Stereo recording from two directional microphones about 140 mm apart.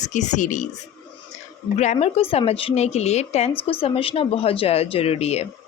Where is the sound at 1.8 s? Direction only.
50° left (ahead or behind).